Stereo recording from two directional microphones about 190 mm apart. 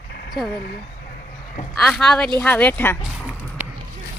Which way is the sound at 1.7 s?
5° left (ahead or behind).